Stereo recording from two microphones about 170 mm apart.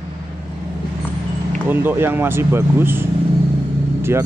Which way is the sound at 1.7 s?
10° right (ahead or behind).